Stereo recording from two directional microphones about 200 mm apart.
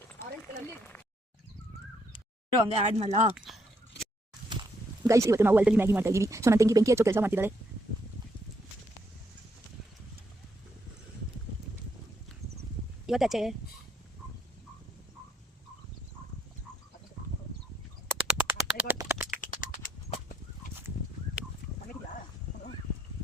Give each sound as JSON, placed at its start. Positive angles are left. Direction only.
{"t": 0.7, "sound": "a sound", "side_deg": 10}
{"t": 2.6, "sound": "speech", "side_deg": -30}
{"t": 3.3, "sound": "speech", "side_deg": 0}
{"t": 5.0, "sound": "speech", "side_deg": -15}
{"t": 13.1, "sound": "speech", "side_deg": 0}
{"t": 18.3, "sound": "a sound", "side_deg": -10}
{"t": 19.3, "sound": "chicken", "side_deg": 40}